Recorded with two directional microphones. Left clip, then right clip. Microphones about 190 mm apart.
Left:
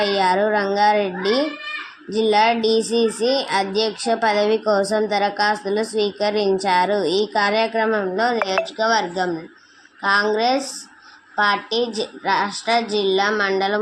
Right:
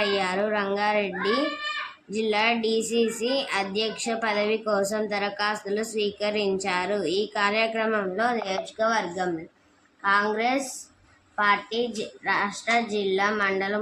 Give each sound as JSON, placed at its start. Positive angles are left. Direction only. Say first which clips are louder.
{"t": 0.0, "sound": "a child's voice", "louder": "left 7 dB", "side_deg": 25}